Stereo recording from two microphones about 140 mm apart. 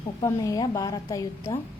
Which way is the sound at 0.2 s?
25° left (ahead or behind).